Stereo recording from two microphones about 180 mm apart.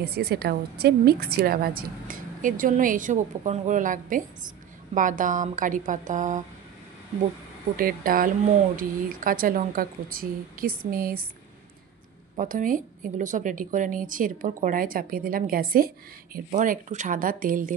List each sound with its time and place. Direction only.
0.0 s a woman's voice: 60° right (ahead or behind); by 6.4 s 45° right (ahead or behind)
7.7 s a woman's voice: 50° right (ahead or behind)
12.4 s a woman's voice: 45° right (ahead or behind)